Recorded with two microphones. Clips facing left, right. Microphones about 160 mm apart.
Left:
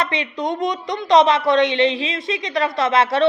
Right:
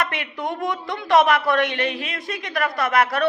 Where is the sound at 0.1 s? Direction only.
20° left (ahead or behind).